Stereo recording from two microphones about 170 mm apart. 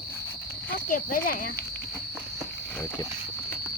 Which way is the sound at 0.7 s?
55° left (ahead or behind).